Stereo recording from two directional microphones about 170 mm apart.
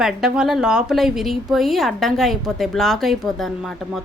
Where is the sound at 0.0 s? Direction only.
5° right (ahead or behind).